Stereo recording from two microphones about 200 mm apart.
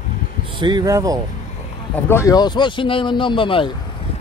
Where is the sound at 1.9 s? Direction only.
10° left (ahead or behind).